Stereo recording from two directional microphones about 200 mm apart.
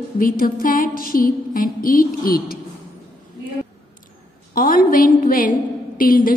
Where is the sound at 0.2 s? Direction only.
45° left (ahead or behind).